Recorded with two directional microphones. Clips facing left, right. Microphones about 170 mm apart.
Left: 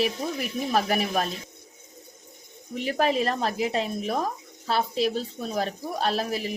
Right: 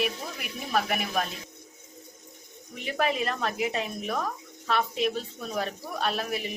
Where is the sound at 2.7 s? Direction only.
35° left (ahead or behind).